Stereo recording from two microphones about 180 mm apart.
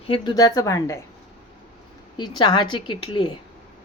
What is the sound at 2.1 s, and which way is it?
A woman's voice, 25° left (ahead or behind).